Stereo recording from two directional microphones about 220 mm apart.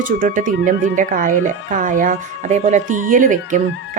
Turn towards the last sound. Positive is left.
turn(degrees=-35)  # may be behind; listen again after turning